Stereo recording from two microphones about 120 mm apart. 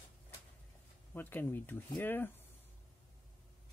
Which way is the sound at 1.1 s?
15° left (ahead or behind).